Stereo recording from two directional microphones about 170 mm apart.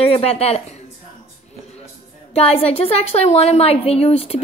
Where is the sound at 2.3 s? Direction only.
35° left (ahead or behind).